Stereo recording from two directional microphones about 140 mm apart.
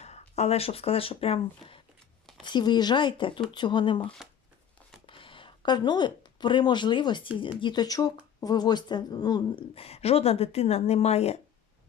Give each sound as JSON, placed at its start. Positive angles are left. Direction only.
{"t": 0.0, "sound": "speech", "side_deg": 50}
{"t": 2.4, "sound": "speech", "side_deg": 30}
{"t": 9.7, "sound": "a woman's voice", "side_deg": 45}